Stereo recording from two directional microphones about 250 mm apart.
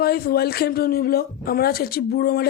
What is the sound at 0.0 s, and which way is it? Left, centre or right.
Speech, left.